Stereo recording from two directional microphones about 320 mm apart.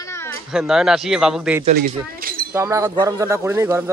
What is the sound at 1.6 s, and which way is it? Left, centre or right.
Speech, right.